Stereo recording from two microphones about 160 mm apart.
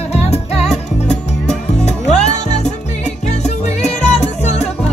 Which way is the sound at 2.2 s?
45° left (ahead or behind).